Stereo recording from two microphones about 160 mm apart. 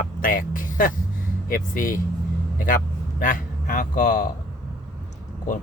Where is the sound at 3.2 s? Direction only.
55° left (ahead or behind).